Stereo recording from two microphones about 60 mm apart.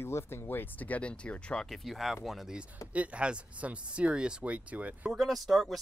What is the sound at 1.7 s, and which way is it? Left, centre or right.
Speech, centre.